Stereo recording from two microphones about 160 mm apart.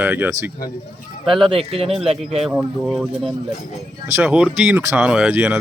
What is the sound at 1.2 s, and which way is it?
Speech, centre (ahead or behind).